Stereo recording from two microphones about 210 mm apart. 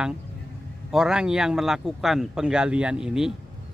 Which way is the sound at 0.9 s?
5° right (ahead or behind).